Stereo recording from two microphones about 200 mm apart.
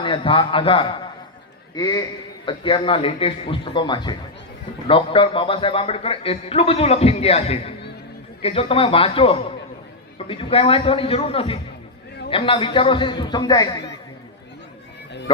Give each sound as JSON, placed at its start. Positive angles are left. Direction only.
{"t": 0.0, "sound": "a man's voice", "side_deg": 25}